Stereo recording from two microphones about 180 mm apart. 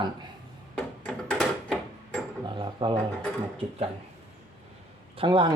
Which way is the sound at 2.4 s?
25° right (ahead or behind).